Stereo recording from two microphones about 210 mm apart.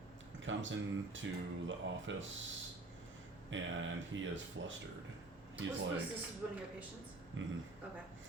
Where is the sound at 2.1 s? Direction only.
60° right (ahead or behind).